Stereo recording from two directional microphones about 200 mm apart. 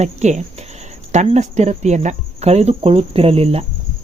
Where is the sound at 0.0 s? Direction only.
35° right (ahead or behind).